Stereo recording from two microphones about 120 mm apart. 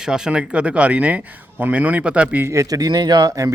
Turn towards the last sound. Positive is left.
turn(degrees=-30)  # may be behind; listen again after turning